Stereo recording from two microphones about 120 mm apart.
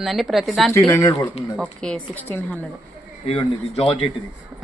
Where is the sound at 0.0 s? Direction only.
Centre (ahead or behind).